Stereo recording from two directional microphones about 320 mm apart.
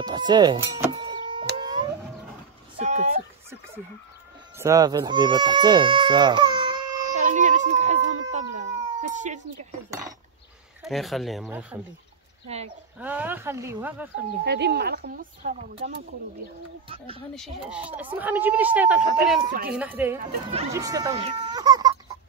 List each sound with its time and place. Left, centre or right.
0.0 s speech: centre
1.6 s a sound: centre
2.8 s dog: right
4.6 s speech: centre
7.2 s a sound: right
9.8 s chink: centre
10.8 s speech: centre
12.4 s a sound: centre
13.0 s speech: centre
14.4 s speech: right
15.7 s speech: centre
17.6 s speech: centre